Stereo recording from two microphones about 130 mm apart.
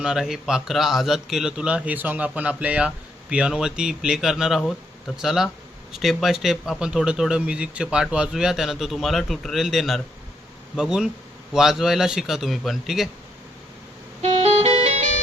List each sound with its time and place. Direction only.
0.0 s a man's voice: 5° right (ahead or behind)
14.2 s music: 55° right (ahead or behind)